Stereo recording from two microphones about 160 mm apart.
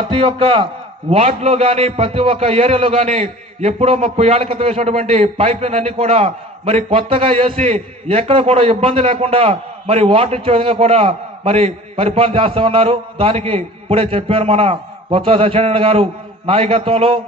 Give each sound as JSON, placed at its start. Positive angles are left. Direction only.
{"t": 0.1, "sound": "a man's voice", "side_deg": -35}